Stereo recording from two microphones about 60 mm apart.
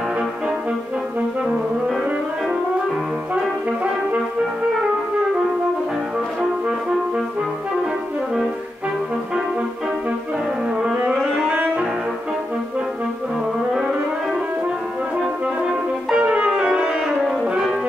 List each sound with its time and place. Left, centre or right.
0.2 s music: centre
10.7 s music: centre
11.5 s brass instrument: right
15.4 s music: centre